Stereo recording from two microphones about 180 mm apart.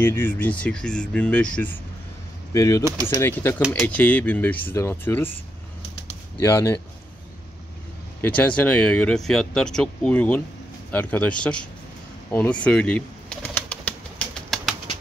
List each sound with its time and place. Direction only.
0.0 s speech: 10° left (ahead or behind)
6.4 s speech: 15° left (ahead or behind)
8.2 s speech: 10° left (ahead or behind)
12.3 s bird: 10° left (ahead or behind)